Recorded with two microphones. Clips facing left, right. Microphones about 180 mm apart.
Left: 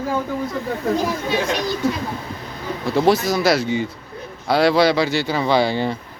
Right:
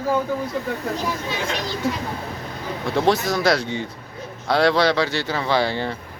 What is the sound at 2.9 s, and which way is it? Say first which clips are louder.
Speech: left 3 dB; centre (ahead or behind).